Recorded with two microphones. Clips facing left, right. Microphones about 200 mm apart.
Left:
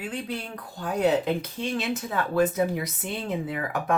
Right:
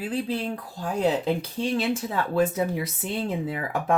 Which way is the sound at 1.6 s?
30° right (ahead or behind).